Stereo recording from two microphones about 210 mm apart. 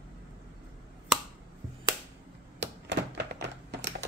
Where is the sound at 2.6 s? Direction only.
55° right (ahead or behind).